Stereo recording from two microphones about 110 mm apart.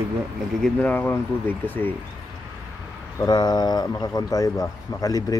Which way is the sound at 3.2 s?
40° left (ahead or behind).